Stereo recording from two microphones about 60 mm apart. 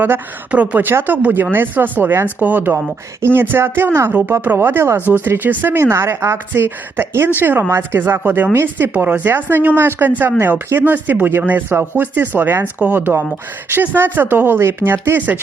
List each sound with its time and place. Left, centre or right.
0.5 s speech: right
2.7 s speech: right
6.5 s speech: right